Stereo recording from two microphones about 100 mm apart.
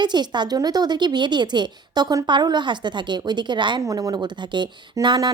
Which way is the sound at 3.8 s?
35° right (ahead or behind).